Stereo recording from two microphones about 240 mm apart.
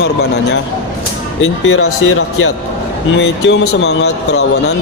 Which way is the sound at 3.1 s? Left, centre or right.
Left.